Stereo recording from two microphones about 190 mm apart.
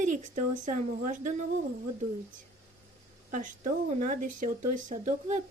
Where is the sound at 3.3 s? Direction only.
40° right (ahead or behind).